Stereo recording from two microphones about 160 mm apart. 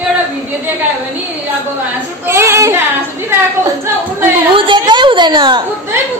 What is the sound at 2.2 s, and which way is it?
Speech, 15° right (ahead or behind).